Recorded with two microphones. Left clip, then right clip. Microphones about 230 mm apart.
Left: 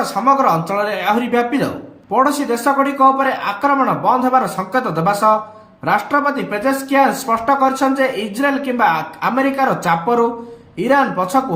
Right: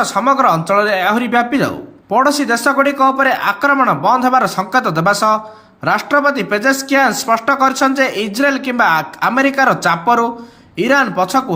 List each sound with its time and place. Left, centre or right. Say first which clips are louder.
0.0 s speech: right 2 dB; centre